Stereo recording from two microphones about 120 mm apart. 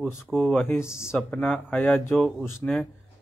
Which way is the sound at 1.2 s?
5° left (ahead or behind).